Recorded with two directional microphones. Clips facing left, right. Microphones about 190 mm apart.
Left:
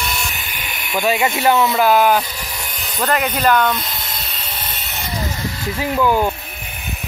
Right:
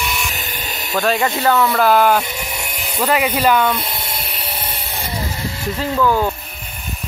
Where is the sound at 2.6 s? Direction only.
25° right (ahead or behind).